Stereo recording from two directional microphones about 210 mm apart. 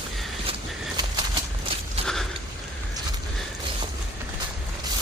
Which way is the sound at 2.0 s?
Centre (ahead or behind).